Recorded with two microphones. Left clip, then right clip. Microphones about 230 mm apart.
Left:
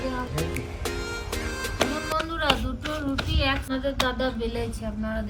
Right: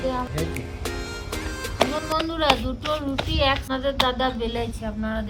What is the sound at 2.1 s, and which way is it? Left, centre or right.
Music, right.